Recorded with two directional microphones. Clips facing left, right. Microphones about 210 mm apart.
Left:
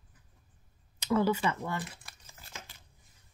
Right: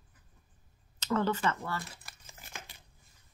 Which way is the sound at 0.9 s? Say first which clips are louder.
Left 3 dB; 10° left (ahead or behind).